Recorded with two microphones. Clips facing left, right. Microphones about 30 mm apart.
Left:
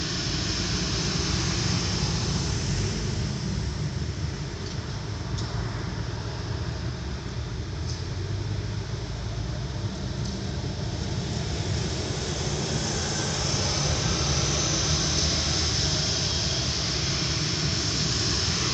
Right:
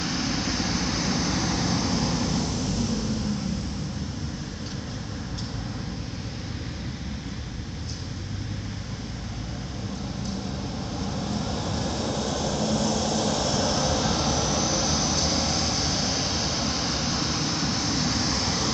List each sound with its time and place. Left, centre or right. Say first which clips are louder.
0.0 s vehicle: right 3 dB; left
12.3 s vehicle: right 4 dB; right
12.5 s vehicle: right 6 dB; right
14.8 s vehicle: right 2 dB; left
17.2 s a sound: right 2 dB; left